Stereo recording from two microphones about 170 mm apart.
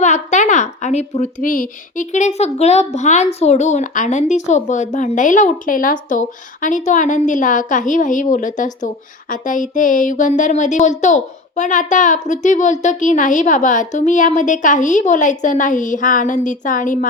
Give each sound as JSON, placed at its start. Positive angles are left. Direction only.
{"t": 0.0, "sound": "a woman's voice", "side_deg": 45}